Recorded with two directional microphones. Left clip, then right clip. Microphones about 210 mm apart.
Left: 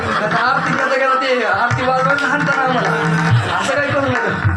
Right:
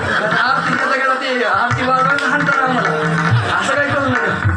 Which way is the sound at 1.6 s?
35° left (ahead or behind).